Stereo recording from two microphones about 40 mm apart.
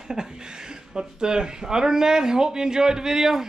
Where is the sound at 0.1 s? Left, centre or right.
Centre.